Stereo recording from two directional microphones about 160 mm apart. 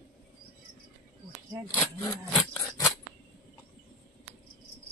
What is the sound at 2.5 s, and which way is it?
Scissors, 20° left (ahead or behind).